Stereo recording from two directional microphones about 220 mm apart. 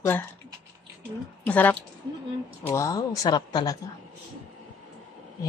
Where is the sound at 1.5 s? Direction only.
10° left (ahead or behind).